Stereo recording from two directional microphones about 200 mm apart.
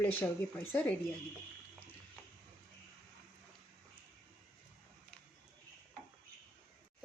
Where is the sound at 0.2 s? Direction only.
10° left (ahead or behind).